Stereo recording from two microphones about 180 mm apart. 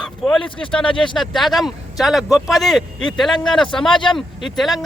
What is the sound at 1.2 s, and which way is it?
Speech, centre (ahead or behind).